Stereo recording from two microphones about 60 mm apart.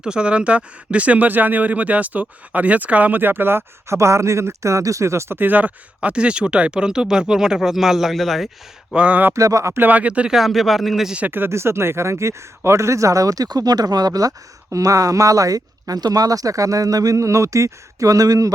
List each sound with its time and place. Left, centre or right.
0.0 s speech: centre; by 3.9 s right
3.9 s speech: right
5.4 s speech: right; by 8.4 s centre
8.9 s speech: right
9.3 s speech: right
9.7 s speech: right
10.3 s speech: centre
11.3 s speech: right
11.5 s speech: right